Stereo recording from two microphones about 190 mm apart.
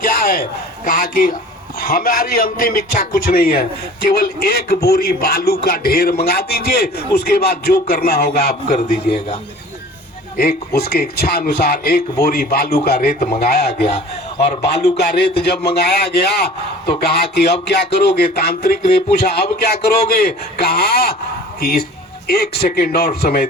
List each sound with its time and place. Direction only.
0.0 s a sound: 45° left (ahead or behind)
0.9 s a man's voice: 50° left (ahead or behind)
10.8 s a man's voice: 55° left (ahead or behind)